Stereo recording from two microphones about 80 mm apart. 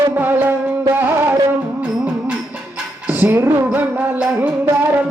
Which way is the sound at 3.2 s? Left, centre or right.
Right.